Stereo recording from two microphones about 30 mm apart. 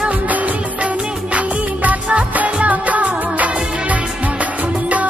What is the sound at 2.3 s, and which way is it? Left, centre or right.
Music of bollywood, right.